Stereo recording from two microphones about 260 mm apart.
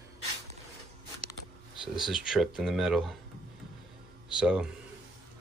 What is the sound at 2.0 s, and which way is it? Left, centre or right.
Speech, centre.